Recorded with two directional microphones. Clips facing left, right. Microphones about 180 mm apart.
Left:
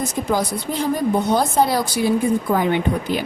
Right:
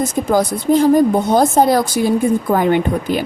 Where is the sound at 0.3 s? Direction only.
45° right (ahead or behind).